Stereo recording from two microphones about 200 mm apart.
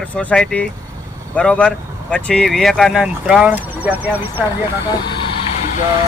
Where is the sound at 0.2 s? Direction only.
5° left (ahead or behind).